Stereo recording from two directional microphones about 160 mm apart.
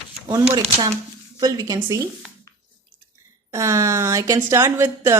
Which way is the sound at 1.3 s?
20° right (ahead or behind).